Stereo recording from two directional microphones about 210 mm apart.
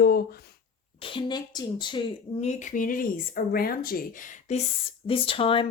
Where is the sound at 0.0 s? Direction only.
45° left (ahead or behind).